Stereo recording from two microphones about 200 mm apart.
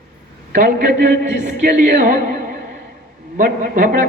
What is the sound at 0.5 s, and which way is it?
A man's voice, 40° right (ahead or behind).